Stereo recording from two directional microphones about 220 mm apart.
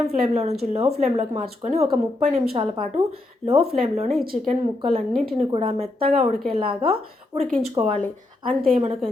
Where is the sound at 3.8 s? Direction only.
30° right (ahead or behind).